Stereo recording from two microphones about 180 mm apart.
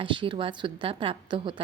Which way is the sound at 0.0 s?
25° right (ahead or behind).